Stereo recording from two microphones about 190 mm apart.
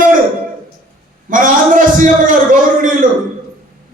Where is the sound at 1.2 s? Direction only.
45° right (ahead or behind).